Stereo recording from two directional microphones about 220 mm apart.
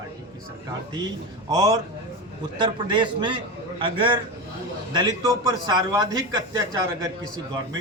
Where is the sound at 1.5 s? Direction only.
15° right (ahead or behind).